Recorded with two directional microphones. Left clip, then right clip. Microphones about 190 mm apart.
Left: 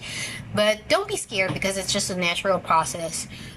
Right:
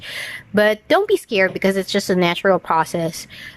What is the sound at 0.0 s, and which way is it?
A woman's voice, 40° right (ahead or behind).